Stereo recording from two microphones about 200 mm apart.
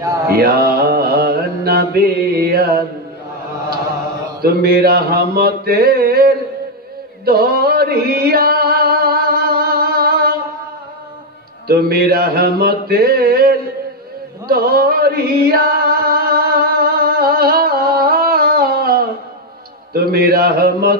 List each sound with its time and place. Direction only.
0.3 s mantra: 50° right (ahead or behind)
4.4 s mantra: 50° right (ahead or behind)
7.2 s music: 50° right (ahead or behind)
11.6 s mantra: 50° right (ahead or behind)
14.5 s chant: 50° right (ahead or behind)
19.9 s mantra: 50° right (ahead or behind)